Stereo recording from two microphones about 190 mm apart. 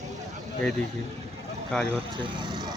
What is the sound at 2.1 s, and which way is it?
Speech, 25° right (ahead or behind).